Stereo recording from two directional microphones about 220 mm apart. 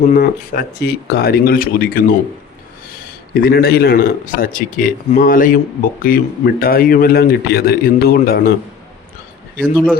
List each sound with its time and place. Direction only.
0.1 s a man's voice: 40° left (ahead or behind)
9.6 s a man's voice: 5° left (ahead or behind)